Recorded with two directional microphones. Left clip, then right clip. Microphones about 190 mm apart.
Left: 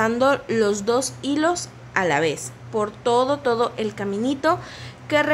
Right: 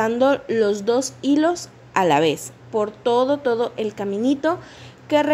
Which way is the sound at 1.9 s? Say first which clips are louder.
Right 3 dB; 25° right (ahead or behind).